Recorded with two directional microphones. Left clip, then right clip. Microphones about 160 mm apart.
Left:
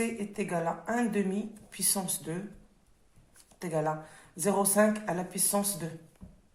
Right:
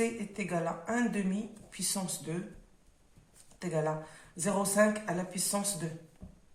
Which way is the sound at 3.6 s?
35° left (ahead or behind).